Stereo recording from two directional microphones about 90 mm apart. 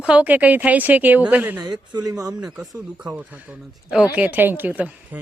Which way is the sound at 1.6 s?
50° right (ahead or behind).